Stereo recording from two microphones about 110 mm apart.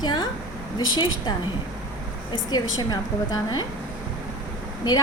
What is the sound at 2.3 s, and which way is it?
A woman's voice, 35° left (ahead or behind).